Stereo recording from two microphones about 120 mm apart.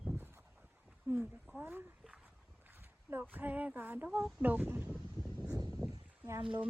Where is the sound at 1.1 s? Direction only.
20° right (ahead or behind).